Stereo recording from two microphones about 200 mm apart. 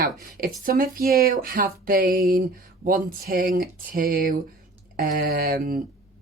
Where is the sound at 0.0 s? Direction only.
45° right (ahead or behind).